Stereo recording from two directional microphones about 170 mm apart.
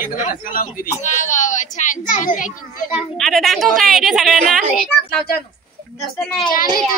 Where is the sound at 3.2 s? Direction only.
Centre (ahead or behind).